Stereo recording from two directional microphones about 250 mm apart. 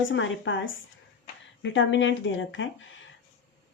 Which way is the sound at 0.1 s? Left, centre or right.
Left.